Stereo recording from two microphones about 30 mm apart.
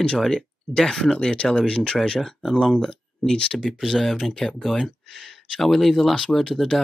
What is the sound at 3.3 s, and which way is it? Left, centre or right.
Speech, left.